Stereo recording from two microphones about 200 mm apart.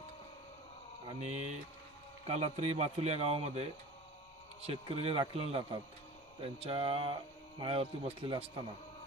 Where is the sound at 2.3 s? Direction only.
35° right (ahead or behind).